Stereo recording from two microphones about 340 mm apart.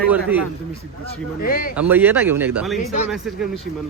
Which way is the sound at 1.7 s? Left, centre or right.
Centre.